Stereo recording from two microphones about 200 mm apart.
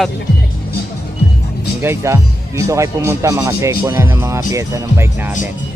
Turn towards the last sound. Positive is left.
turn(degrees=-15)  # may be behind; listen again after turning